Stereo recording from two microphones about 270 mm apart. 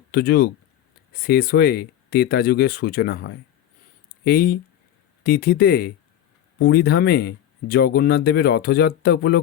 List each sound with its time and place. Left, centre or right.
0.1 s speech: left